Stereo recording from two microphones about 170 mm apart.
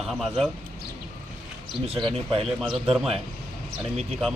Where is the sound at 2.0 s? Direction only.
35° right (ahead or behind).